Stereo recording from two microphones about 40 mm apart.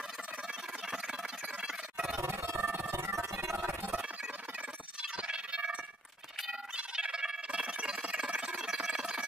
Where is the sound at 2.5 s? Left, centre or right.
Right.